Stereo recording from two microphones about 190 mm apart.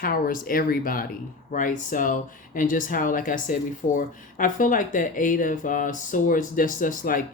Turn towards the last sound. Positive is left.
turn(degrees=45)  # may be behind; listen again after turning